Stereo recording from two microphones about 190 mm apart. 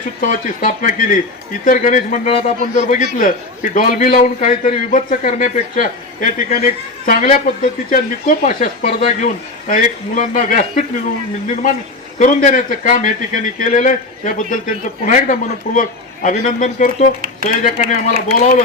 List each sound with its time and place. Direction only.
0.2 s a man's voice: 45° left (ahead or behind)